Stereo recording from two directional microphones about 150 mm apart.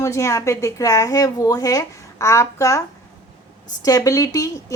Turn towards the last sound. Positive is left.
turn(degrees=25)  # may be behind; listen again after turning